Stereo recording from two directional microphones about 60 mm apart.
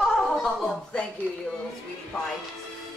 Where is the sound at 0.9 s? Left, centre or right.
Centre.